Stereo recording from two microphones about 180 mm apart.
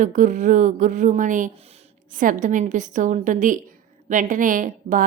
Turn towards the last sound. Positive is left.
turn(degrees=-50)  # may be behind; listen again after turning